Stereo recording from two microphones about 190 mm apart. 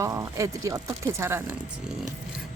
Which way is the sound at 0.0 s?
15° right (ahead or behind).